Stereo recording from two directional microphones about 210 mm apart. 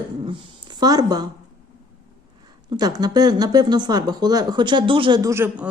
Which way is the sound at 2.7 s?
20° right (ahead or behind).